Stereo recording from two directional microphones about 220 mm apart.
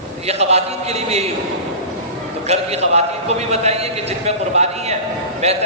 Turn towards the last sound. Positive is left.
turn(degrees=-30)  # may be behind; listen again after turning